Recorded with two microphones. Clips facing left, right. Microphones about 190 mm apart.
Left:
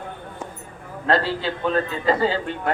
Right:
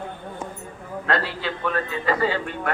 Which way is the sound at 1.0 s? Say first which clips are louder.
Left 4 dB; 30° left (ahead or behind).